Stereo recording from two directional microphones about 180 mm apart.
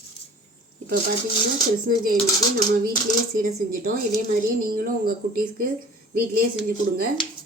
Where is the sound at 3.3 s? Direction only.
50° right (ahead or behind).